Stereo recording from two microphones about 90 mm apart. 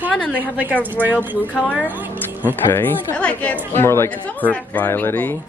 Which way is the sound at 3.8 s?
30° left (ahead or behind).